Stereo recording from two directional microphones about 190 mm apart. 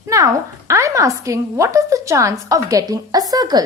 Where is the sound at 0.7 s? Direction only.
15° right (ahead or behind).